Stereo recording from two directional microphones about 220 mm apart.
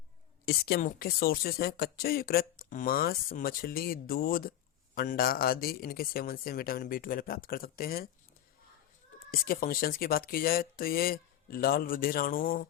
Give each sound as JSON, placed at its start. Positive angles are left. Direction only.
{"t": 0.4, "sound": "speech", "side_deg": 45}
{"t": 9.3, "sound": "speech", "side_deg": 40}